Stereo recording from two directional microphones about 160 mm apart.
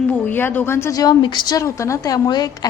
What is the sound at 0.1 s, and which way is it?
A woman's voice, 10° left (ahead or behind).